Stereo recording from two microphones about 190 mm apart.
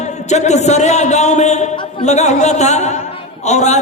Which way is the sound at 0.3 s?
35° left (ahead or behind).